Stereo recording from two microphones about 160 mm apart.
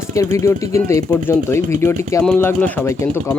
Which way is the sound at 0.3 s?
20° left (ahead or behind).